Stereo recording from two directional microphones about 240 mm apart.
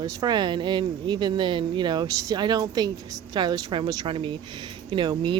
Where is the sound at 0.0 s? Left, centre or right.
Centre.